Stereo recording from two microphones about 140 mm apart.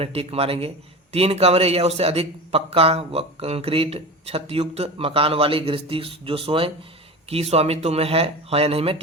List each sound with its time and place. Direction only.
0.0 s a man's voice: 45° right (ahead or behind)